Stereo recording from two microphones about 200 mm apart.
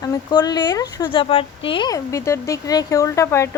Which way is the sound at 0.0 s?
20° left (ahead or behind).